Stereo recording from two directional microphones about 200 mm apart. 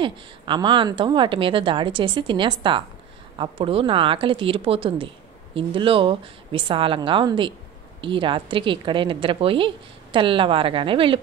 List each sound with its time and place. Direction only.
0.0 s speech: 25° right (ahead or behind)